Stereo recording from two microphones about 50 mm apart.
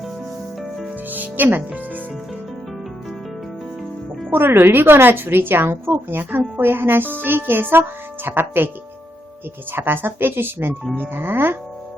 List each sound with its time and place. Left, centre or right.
1.1 s speech: right
4.3 s a woman's voice: right
9.7 s a woman's voice: right